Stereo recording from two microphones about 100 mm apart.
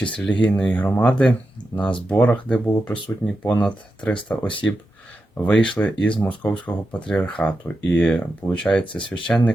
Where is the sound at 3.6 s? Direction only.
10° left (ahead or behind).